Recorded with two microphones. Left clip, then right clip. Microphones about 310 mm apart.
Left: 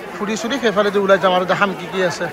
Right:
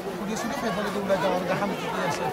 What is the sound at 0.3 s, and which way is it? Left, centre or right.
Speech, centre.